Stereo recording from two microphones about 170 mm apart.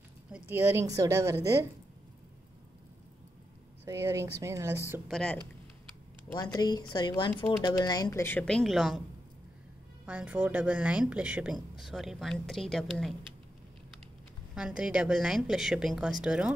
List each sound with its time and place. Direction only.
0.3 s a woman's voice: 15° right (ahead or behind)
3.8 s a woman's voice: 15° right (ahead or behind)
5.1 s a woman's voice: 5° left (ahead or behind)
6.3 s speech: 20° left (ahead or behind); by 9.0 s centre (ahead or behind)
10.0 s a woman's voice: 10° right (ahead or behind)
14.5 s a woman's voice: 5° right (ahead or behind)